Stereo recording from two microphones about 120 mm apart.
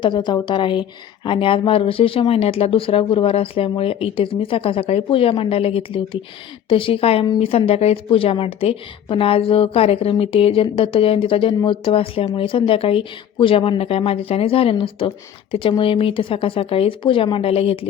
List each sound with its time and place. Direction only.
0.0 s a woman's voice: 40° left (ahead or behind)